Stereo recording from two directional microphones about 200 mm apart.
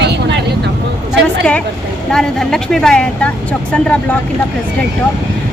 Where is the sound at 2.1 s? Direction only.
Centre (ahead or behind).